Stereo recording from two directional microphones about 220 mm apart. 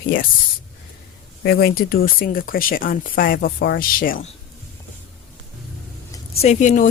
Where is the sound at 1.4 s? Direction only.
45° left (ahead or behind).